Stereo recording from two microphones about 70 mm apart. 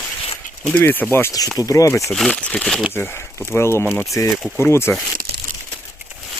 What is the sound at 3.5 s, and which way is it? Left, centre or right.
Speech, left.